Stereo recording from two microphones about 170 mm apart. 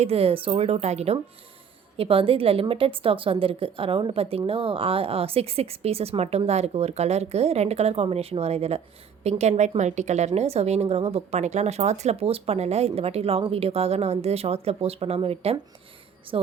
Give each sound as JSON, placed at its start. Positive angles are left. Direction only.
{"t": 0.0, "sound": "a woman's voice", "side_deg": -35}